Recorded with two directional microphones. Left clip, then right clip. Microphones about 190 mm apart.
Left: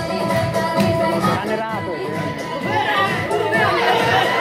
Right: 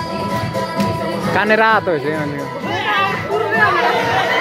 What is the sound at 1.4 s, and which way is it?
Music, 45° right (ahead or behind).